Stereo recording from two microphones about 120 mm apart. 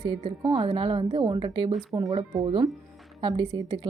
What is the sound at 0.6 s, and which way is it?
Speech, 55° right (ahead or behind).